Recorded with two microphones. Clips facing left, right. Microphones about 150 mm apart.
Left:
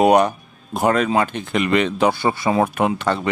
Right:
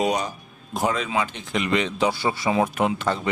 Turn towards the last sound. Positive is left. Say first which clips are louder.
# left 3 dB
turn(degrees=65)  # may be behind; listen again after turning